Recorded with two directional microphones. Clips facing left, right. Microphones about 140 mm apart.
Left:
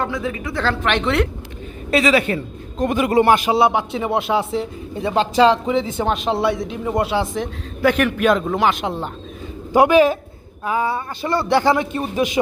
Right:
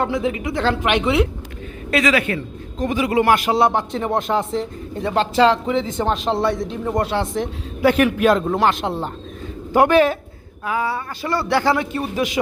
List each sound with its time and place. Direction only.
0.0 s a woman's voice: 25° right (ahead or behind); by 1.3 s 5° right (ahead or behind)
1.9 s a man's voice: 30° left (ahead or behind)
2.7 s a man's voice: 55° left (ahead or behind)
3.1 s speech: 35° left (ahead or behind)
3.3 s speech: 15° left (ahead or behind)
7.3 s a man's voice: centre (ahead or behind)
9.7 s speech: 15° left (ahead or behind)
10.6 s a man's voice: 25° left (ahead or behind)